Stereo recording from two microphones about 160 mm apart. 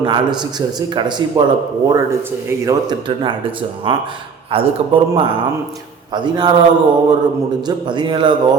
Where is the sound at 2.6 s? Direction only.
30° right (ahead or behind).